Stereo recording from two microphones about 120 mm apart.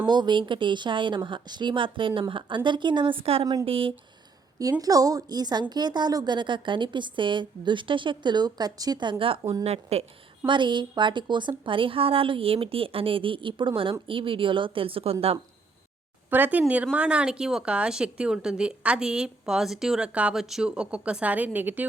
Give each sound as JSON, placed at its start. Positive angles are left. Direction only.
{"t": 0.0, "sound": "a woman's voice", "side_deg": -40}
{"t": 3.4, "sound": "a woman's voice", "side_deg": -30}
{"t": 3.7, "sound": "a woman's voice", "side_deg": -50}
{"t": 4.8, "sound": "a woman's voice", "side_deg": -30}
{"t": 9.6, "sound": "a woman's voice", "side_deg": -60}
{"t": 10.4, "sound": "a woman's voice", "side_deg": -40}
{"t": 16.3, "sound": "a woman's voice", "side_deg": -15}